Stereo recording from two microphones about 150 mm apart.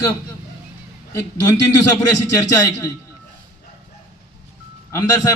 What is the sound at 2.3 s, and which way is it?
Speech, 25° left (ahead or behind).